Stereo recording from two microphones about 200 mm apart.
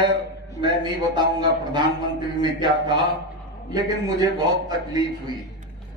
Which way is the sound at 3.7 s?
20° right (ahead or behind).